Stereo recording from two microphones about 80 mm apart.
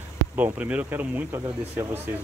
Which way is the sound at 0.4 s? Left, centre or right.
Centre.